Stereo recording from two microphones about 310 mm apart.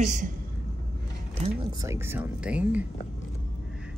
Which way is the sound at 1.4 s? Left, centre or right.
Centre.